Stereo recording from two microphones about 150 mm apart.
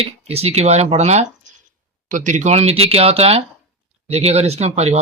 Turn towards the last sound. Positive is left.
turn(degrees=-45)  # may be behind; listen again after turning